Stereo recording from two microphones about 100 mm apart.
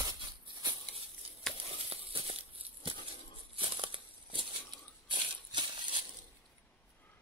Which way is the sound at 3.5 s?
60° right (ahead or behind).